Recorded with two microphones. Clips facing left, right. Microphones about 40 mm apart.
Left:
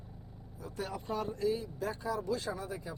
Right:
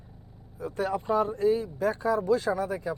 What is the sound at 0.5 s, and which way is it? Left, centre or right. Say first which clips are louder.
Speech: right 11 dB; right.